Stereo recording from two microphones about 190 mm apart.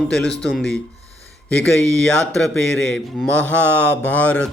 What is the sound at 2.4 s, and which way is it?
A man's voice, 5° left (ahead or behind).